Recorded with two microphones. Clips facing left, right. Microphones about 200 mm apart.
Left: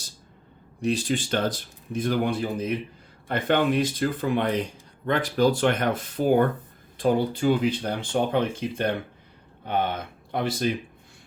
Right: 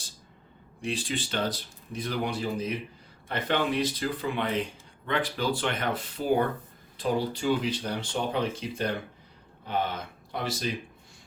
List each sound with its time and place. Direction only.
0.8 s speech: 40° left (ahead or behind)
10.3 s speech: 55° left (ahead or behind)